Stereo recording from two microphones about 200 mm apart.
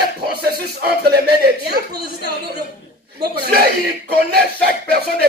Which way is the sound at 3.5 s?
50° right (ahead or behind).